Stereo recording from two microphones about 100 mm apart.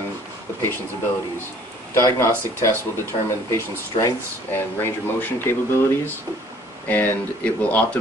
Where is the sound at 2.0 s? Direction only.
30° left (ahead or behind).